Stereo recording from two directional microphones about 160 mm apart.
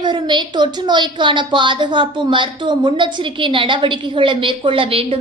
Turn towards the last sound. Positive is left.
turn(degrees=-35)  # may be behind; listen again after turning